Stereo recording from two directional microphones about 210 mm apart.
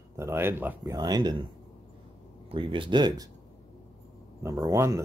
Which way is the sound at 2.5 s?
25° right (ahead or behind).